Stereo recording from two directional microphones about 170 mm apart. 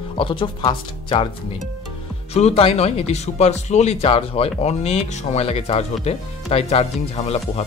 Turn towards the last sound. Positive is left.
turn(degrees=35)  # may be behind; listen again after turning